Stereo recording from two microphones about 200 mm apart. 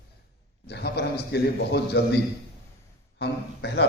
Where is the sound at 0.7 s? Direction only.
55° left (ahead or behind).